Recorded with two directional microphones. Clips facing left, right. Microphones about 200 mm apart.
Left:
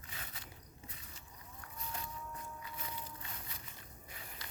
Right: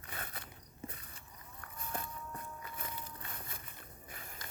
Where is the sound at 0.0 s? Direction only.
55° right (ahead or behind).